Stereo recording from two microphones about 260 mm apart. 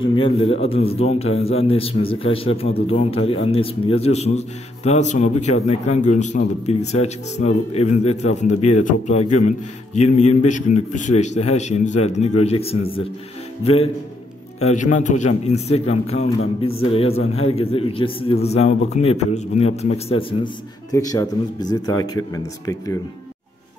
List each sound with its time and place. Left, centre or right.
0.0 s a man's voice: centre
14.6 s a man's voice: left